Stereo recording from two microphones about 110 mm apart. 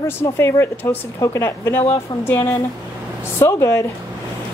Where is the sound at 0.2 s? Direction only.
20° left (ahead or behind).